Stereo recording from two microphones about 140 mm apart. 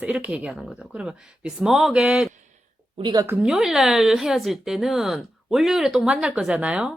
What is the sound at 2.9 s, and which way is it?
Speech, 30° right (ahead or behind).